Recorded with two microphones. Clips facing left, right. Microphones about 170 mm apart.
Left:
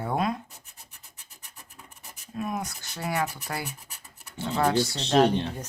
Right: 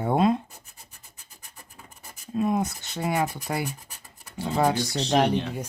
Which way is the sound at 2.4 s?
25° right (ahead or behind).